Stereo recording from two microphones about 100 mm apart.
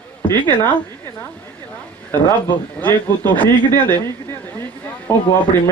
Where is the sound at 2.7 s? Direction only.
15° left (ahead or behind).